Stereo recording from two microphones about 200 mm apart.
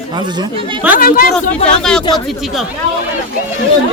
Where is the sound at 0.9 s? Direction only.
45° left (ahead or behind).